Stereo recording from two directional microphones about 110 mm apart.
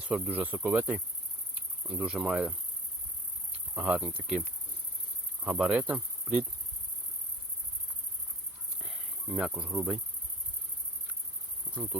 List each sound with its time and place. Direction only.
0.0 s cricket: 10° right (ahead or behind)
3.8 s cricket: 10° right (ahead or behind)
5.4 s speech: 5° right (ahead or behind)
8.8 s cricket: centre (ahead or behind)
9.5 s cricket: 10° right (ahead or behind)
11.7 s insect: 10° right (ahead or behind)